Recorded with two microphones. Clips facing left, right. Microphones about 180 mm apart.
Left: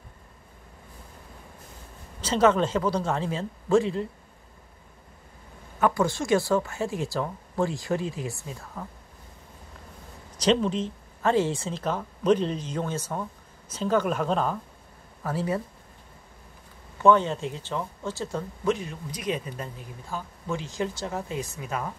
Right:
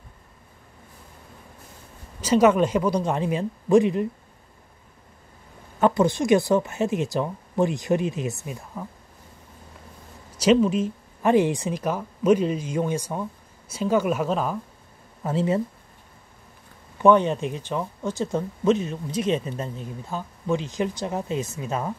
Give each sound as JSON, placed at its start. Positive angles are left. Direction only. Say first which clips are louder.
{"t": 2.2, "sound": "a woman's voice", "louder": "right 4 dB", "side_deg": -10}
{"t": 5.8, "sound": "speech", "louder": "right 4 dB", "side_deg": -25}
{"t": 10.4, "sound": "a woman's voice", "louder": "right 5 dB", "side_deg": -10}
{"t": 15.2, "sound": "speech", "louder": "right 5 dB", "side_deg": -20}
{"t": 17.0, "sound": "speech", "louder": "right 3 dB", "side_deg": -15}